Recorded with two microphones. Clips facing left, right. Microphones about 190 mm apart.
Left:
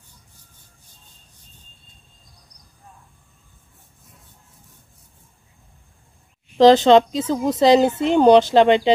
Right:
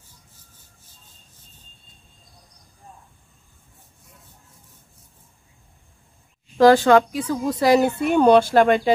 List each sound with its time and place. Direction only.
6.6 s speech: 20° left (ahead or behind)